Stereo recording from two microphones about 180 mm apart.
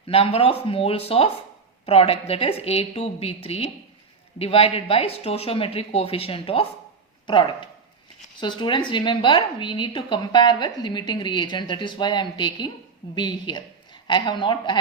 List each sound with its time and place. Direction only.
0.1 s a woman's voice: 30° left (ahead or behind)